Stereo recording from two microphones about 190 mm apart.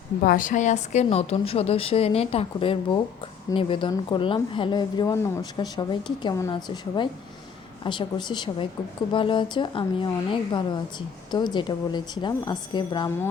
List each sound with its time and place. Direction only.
0.3 s a woman's voice: 45° left (ahead or behind); by 13.1 s 25° left (ahead or behind)